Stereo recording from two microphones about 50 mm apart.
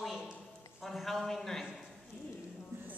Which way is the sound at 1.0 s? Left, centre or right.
Centre.